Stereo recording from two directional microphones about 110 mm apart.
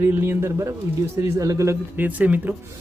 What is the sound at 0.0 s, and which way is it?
Speech, 20° right (ahead or behind).